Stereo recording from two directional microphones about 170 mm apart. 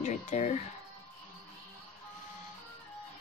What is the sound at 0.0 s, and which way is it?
Speech, 45° left (ahead or behind).